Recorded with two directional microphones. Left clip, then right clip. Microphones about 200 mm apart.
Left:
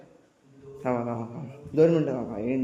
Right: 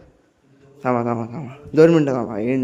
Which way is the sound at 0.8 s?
30° right (ahead or behind).